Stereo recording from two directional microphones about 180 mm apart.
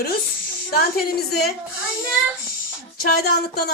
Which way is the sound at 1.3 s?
65° left (ahead or behind).